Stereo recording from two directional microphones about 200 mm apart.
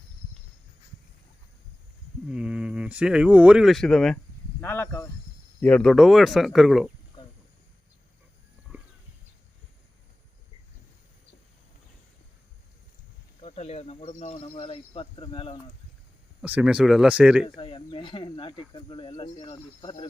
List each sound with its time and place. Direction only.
2.3 s speech: 5° right (ahead or behind)
4.6 s snake: 10° left (ahead or behind)
5.5 s speech: 5° left (ahead or behind)
8.7 s a sound: centre (ahead or behind)
13.4 s a sound: 30° left (ahead or behind)
16.4 s speech: 5° right (ahead or behind)
17.6 s speech: 25° left (ahead or behind)